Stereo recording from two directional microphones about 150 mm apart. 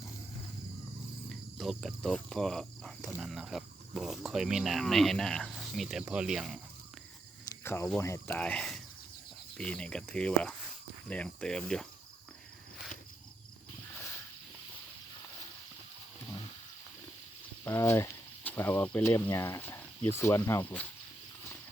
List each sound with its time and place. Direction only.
1.3 s cricket: centre (ahead or behind)
3.2 s speech: centre (ahead or behind)
7.6 s speech: 15° left (ahead or behind)
8.4 s speech: 5° left (ahead or behind)
13.9 s a sound: 15° left (ahead or behind)
17.7 s speech: 15° left (ahead or behind)